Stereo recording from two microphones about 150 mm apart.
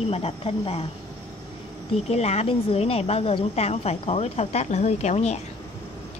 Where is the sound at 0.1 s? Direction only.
40° left (ahead or behind).